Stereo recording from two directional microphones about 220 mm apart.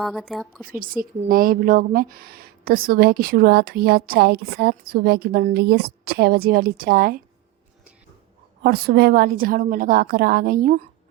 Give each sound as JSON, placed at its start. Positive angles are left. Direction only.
{"t": 0.0, "sound": "a woman's voice", "side_deg": 0}
{"t": 0.7, "sound": "a woman's voice", "side_deg": -40}
{"t": 8.6, "sound": "a woman's voice", "side_deg": -45}